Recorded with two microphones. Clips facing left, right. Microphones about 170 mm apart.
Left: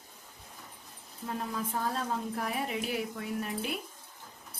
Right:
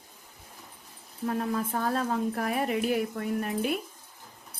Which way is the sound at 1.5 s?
55° right (ahead or behind).